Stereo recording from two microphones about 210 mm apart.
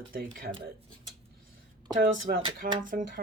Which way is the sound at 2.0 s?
45° right (ahead or behind).